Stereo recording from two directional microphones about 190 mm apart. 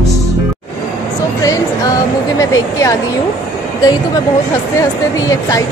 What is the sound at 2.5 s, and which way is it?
Speech, 15° left (ahead or behind).